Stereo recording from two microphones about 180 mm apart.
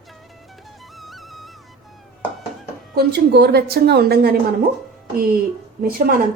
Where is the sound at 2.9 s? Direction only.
60° right (ahead or behind).